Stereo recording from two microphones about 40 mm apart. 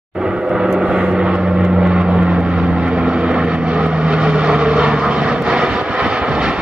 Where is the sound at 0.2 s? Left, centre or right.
Centre.